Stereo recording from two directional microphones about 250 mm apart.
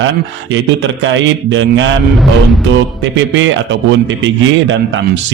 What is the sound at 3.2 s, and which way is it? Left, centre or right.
A man's voice, right.